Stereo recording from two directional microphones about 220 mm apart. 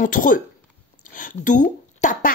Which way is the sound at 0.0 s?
40° left (ahead or behind).